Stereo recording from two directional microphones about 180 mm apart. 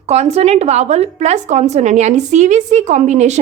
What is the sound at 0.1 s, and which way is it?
A woman's voice, 35° right (ahead or behind).